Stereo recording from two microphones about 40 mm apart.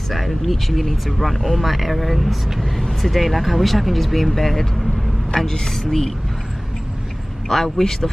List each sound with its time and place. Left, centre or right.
0.1 s speech: centre
5.5 s a man's voice: centre
7.4 s a man's voice: centre